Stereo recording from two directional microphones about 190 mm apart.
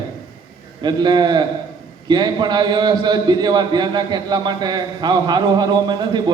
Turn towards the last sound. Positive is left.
turn(degrees=-20)  # may be behind; listen again after turning